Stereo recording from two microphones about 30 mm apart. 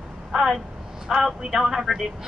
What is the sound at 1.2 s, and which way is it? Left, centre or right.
Speech, centre.